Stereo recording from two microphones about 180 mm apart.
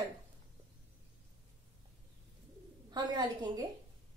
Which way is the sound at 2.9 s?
25° right (ahead or behind).